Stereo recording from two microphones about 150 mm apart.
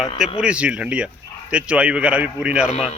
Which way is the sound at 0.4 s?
10° right (ahead or behind).